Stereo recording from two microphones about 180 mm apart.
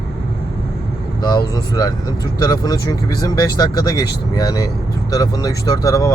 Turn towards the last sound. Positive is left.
turn(degrees=20)  # may be behind; listen again after turning